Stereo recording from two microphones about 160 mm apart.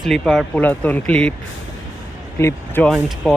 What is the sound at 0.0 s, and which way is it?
Speech, centre (ahead or behind).